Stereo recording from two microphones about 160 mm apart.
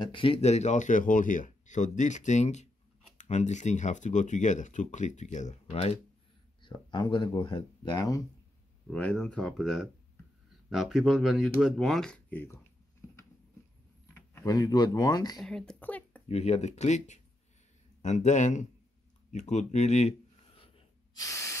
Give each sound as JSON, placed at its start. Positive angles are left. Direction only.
{"t": 0.1, "sound": "speech", "side_deg": 35}
{"t": 8.9, "sound": "speech", "side_deg": 5}
{"t": 14.4, "sound": "speech", "side_deg": 25}
{"t": 15.4, "sound": "a woman's voice", "side_deg": 5}
{"t": 16.3, "sound": "speech", "side_deg": 40}
{"t": 19.3, "sound": "a sound", "side_deg": 45}
{"t": 21.2, "sound": "spray", "side_deg": 20}